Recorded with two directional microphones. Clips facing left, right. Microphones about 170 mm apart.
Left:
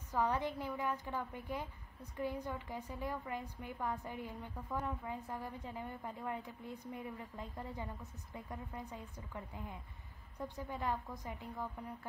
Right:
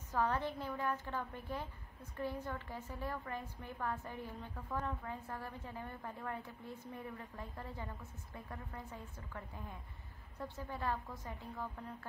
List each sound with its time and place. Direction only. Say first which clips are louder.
0.1 s a woman's voice: left 1 dB; 15° left (ahead or behind)